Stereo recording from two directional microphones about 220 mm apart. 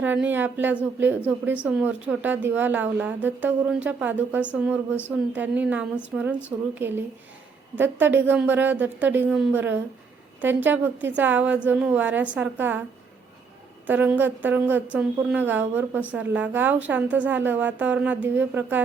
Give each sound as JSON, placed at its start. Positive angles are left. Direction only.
{"t": 0.0, "sound": "a woman's voice", "side_deg": -10}
{"t": 13.8, "sound": "a woman's voice", "side_deg": -5}